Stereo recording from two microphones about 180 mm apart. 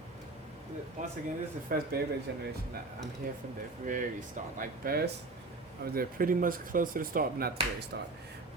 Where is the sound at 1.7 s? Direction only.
50° right (ahead or behind).